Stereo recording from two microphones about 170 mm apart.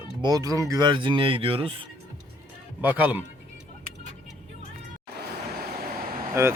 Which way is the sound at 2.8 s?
10° right (ahead or behind).